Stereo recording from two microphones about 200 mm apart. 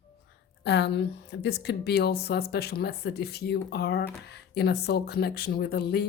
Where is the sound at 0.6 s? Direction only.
55° left (ahead or behind).